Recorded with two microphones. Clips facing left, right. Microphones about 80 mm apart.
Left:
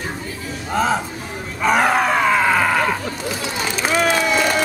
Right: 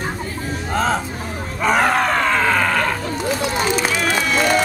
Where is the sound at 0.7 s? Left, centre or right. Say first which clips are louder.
Left 1 dB; centre.